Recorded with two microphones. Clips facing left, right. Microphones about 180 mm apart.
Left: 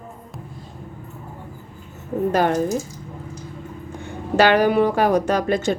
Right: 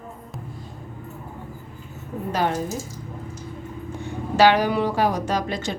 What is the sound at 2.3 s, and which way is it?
Speech, 50° left (ahead or behind).